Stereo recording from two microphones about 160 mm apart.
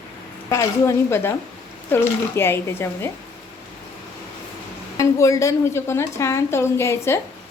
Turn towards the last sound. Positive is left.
turn(degrees=15)  # may be behind; listen again after turning